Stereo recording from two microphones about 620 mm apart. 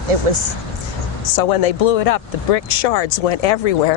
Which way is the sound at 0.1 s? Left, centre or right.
Right.